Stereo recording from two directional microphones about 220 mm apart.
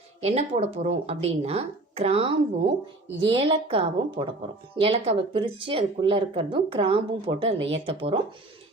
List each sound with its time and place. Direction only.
0.2 s speech: 30° right (ahead or behind)